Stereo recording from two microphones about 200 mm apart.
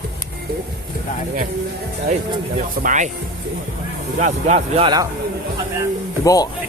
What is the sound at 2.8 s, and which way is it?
Speech, 35° right (ahead or behind).